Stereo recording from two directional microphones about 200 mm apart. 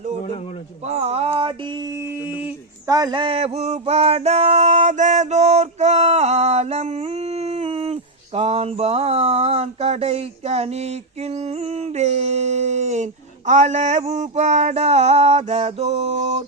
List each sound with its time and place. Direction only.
0.9 s mantra: 30° right (ahead or behind)
2.2 s mantra: 10° right (ahead or behind); by 16.4 s 35° right (ahead or behind)